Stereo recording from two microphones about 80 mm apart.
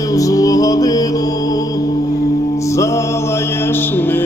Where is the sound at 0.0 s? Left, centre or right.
Left.